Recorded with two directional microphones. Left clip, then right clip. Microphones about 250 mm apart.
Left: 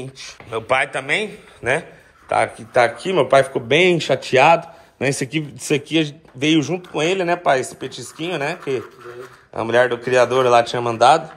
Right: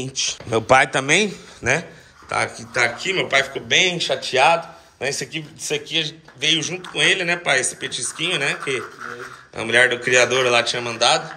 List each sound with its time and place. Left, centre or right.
0.0 s a man's voice: centre; by 11.2 s left